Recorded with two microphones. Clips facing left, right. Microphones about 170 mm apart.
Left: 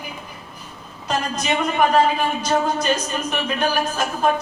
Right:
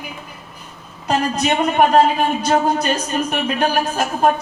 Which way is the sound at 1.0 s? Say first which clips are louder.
Right 5 dB; 60° right (ahead or behind).